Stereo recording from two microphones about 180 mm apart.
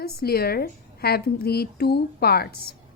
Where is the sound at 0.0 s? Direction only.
60° left (ahead or behind).